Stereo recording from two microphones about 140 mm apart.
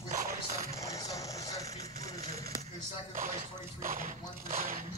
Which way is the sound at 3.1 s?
70° right (ahead or behind).